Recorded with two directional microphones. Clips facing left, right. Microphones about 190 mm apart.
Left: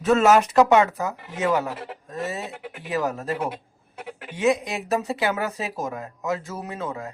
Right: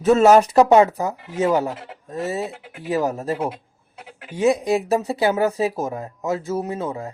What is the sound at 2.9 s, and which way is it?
Speech, 30° right (ahead or behind).